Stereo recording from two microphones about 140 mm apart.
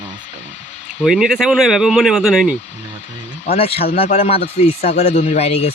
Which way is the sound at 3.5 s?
45° left (ahead or behind).